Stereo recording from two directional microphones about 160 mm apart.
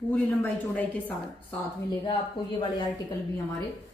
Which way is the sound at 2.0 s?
30° left (ahead or behind).